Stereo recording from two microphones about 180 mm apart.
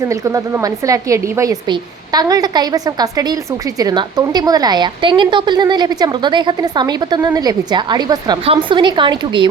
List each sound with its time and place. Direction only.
0.1 s a woman's voice: 15° right (ahead or behind)